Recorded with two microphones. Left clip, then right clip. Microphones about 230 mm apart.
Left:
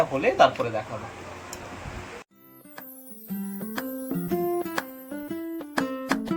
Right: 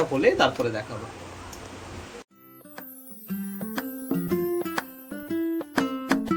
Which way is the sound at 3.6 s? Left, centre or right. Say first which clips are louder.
Left 1 dB; centre.